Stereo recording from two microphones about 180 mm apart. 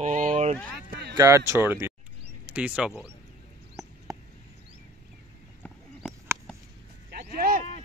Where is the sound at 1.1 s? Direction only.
15° right (ahead or behind).